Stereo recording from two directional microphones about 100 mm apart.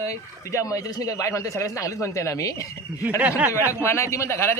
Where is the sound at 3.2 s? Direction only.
15° right (ahead or behind).